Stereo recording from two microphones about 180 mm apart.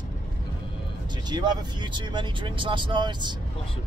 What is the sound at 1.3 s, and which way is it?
Speech, 25° right (ahead or behind).